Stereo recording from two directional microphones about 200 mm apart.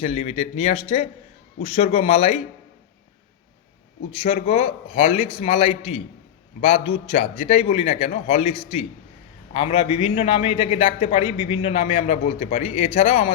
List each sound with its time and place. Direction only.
0.0 s a man's voice: 30° left (ahead or behind)
4.2 s a man's voice: 30° left (ahead or behind)